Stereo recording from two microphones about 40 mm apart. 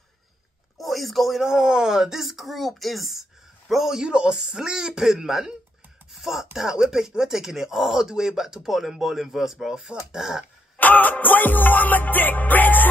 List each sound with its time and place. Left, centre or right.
0.7 s a man's voice: centre
4.0 s speech: right
10.8 s music: left